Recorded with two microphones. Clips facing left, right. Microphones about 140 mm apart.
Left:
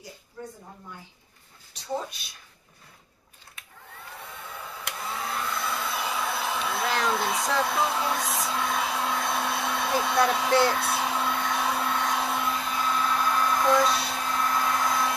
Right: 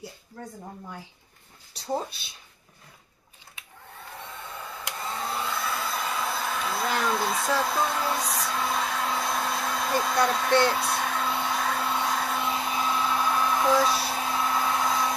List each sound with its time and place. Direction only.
1.7 s speech: 35° right (ahead or behind)
5.0 s hair dryer: centre (ahead or behind)